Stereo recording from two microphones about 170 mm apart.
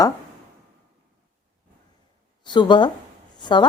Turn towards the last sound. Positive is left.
turn(degrees=25)  # may be behind; listen again after turning